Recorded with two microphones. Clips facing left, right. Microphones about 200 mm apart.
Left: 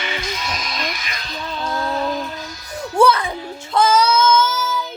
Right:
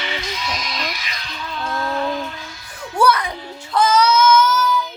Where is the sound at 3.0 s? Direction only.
25° left (ahead or behind).